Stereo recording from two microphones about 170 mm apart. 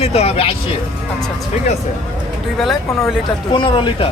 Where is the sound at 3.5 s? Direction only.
30° left (ahead or behind).